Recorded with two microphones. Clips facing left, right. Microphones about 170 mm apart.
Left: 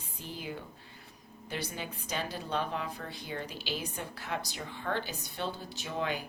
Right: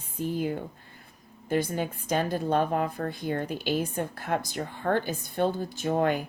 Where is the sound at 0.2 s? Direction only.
50° right (ahead or behind).